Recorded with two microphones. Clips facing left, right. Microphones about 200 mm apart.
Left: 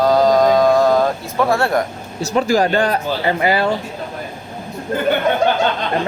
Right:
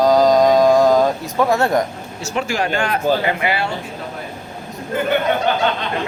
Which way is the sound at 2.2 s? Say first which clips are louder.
Left 6 dB; 35° left (ahead or behind).